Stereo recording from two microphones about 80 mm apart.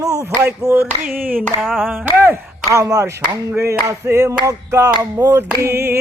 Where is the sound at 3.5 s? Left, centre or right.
Right.